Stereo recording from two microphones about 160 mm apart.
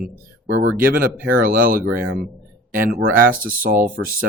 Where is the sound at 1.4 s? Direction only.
60° right (ahead or behind).